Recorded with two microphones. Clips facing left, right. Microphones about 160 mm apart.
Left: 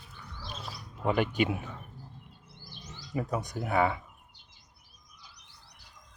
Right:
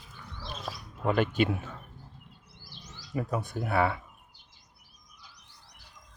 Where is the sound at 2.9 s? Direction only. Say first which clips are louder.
Even; 20° left (ahead or behind).